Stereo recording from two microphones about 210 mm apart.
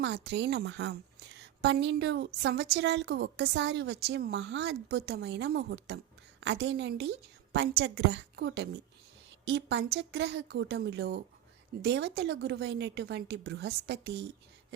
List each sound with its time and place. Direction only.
0.0 s a woman's voice: 55° right (ahead or behind)